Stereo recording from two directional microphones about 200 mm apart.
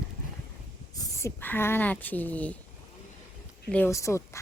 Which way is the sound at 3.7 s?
10° left (ahead or behind).